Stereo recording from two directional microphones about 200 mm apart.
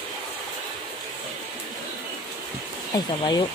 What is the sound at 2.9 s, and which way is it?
Speech, 20° left (ahead or behind).